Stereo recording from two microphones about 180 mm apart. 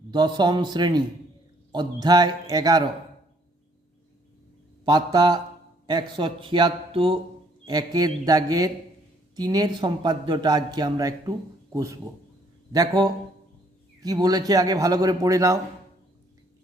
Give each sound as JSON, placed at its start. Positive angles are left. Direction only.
{"t": 0.1, "sound": "a man's voice", "side_deg": -25}
{"t": 4.9, "sound": "a man's voice", "side_deg": -25}